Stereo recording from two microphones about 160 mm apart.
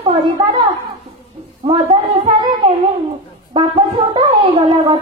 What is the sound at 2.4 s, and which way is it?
Child singing, 30° right (ahead or behind).